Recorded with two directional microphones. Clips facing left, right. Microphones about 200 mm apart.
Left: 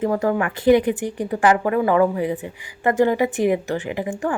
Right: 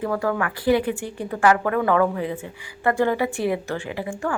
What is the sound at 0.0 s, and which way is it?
A woman's voice, 20° left (ahead or behind).